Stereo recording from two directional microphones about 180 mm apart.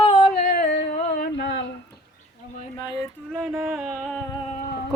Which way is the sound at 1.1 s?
75° left (ahead or behind).